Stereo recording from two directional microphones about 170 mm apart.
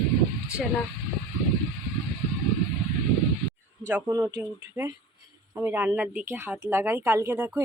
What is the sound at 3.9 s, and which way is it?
A woman's voice, 15° right (ahead or behind).